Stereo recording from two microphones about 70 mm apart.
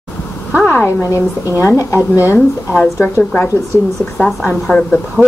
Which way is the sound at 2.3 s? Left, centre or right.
Left.